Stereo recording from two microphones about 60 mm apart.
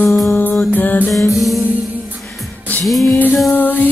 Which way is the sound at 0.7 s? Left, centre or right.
Left.